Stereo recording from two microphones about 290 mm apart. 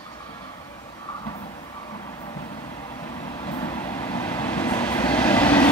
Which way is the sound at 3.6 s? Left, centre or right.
Centre.